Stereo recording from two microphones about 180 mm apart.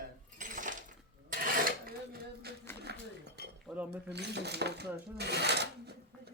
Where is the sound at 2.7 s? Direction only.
15° left (ahead or behind).